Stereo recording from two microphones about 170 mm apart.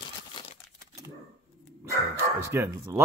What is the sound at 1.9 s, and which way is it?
Bow-wow, 15° right (ahead or behind).